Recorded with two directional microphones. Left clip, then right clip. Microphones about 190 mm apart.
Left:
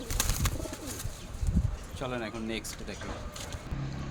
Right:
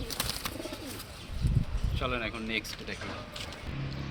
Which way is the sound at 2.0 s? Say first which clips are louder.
Right 2 dB; 65° left (ahead or behind).